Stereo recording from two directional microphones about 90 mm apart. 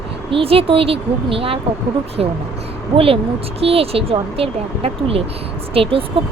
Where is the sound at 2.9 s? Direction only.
90° right.